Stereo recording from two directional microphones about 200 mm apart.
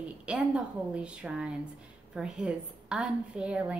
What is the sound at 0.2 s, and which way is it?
A woman's voice, 5° right (ahead or behind).